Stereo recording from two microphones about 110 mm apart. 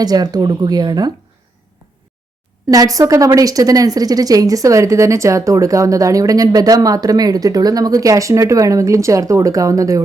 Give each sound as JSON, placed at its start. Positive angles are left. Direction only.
{"t": 0.0, "sound": "a woman's voice", "side_deg": -40}
{"t": 2.6, "sound": "a woman's voice", "side_deg": -35}